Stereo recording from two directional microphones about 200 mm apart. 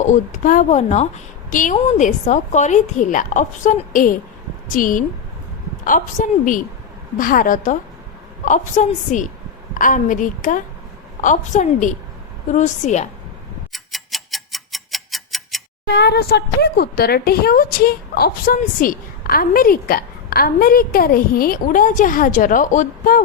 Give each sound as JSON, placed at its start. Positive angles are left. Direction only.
{"t": 0.0, "sound": "a woman's voice", "side_deg": 40}
{"t": 13.7, "sound": "tick-tock", "side_deg": 0}
{"t": 16.0, "sound": "speech", "side_deg": 55}